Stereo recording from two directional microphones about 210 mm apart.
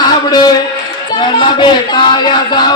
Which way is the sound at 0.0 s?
20° left (ahead or behind).